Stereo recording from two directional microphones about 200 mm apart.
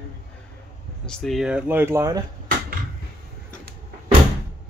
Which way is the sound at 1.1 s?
Centre (ahead or behind).